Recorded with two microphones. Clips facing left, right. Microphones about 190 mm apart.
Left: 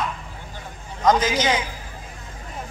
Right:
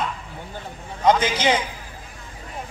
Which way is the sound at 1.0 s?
30° right (ahead or behind).